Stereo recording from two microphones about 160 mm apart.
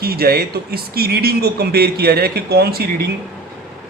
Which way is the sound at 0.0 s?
70° right (ahead or behind).